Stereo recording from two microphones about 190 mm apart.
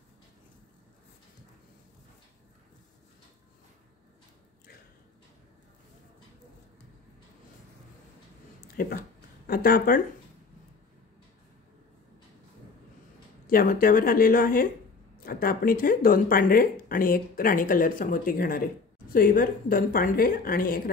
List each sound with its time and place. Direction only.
8.8 s speech: 50° left (ahead or behind)
13.5 s speech: 50° left (ahead or behind)